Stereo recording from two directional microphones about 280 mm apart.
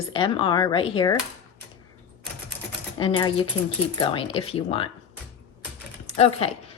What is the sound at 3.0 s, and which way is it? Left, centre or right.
A woman's voice, centre.